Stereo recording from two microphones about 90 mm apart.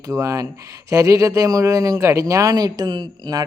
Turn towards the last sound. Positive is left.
turn(degrees=-50)  # may be behind; listen again after turning